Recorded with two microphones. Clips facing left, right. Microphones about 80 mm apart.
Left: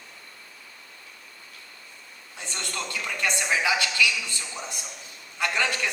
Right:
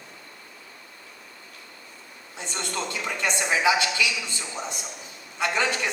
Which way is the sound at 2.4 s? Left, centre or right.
Right.